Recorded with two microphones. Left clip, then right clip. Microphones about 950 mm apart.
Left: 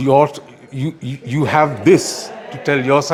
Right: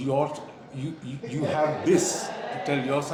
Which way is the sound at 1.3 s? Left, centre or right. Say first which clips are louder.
Left 10 dB; left.